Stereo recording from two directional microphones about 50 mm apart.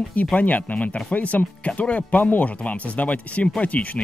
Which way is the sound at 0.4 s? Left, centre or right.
Left.